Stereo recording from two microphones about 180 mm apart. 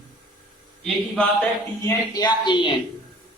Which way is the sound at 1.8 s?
20° left (ahead or behind).